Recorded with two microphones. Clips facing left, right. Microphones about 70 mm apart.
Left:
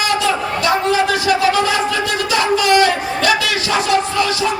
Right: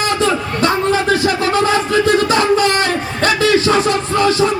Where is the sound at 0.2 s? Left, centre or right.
Right.